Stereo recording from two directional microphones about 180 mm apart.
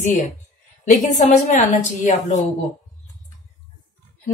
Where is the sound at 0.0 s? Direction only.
40° left (ahead or behind).